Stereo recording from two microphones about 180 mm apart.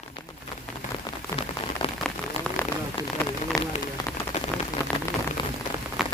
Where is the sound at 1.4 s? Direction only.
30° left (ahead or behind).